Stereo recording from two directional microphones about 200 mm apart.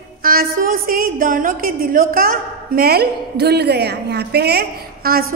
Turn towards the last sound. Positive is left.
turn(degrees=-50)  # may be behind; listen again after turning